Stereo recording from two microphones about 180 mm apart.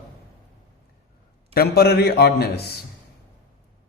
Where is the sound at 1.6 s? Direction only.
60° left (ahead or behind).